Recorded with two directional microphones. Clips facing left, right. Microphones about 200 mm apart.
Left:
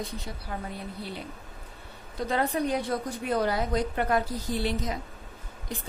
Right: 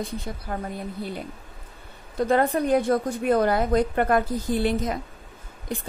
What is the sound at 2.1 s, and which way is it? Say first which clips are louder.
Speech: right 6 dB; 50° right (ahead or behind).